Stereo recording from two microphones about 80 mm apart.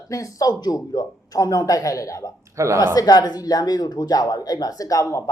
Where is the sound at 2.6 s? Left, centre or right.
Right.